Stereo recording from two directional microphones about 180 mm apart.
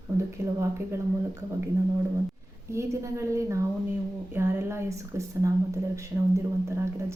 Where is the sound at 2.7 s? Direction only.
15° right (ahead or behind).